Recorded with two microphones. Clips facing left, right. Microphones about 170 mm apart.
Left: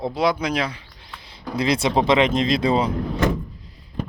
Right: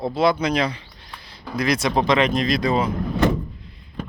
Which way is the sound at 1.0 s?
20° left (ahead or behind).